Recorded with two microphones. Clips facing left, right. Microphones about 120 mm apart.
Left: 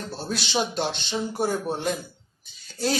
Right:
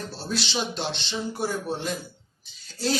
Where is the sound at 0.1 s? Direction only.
50° left (ahead or behind).